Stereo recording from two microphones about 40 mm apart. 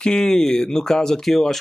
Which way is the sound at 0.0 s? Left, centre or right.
Centre.